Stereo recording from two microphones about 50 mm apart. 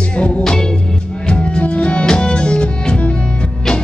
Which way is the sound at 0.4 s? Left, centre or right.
Centre.